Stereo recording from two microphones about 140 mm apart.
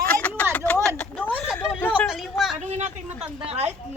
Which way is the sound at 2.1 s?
Centre (ahead or behind).